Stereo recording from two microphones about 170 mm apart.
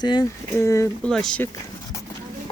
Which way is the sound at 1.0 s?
5° left (ahead or behind).